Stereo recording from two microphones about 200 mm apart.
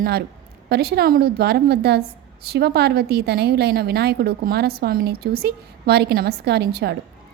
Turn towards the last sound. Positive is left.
turn(degrees=-55)  # may be behind; listen again after turning